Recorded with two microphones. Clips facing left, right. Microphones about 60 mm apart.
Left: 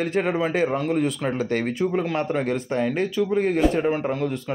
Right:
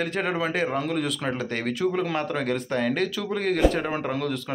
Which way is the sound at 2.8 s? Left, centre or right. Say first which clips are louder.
Left 4 dB; right.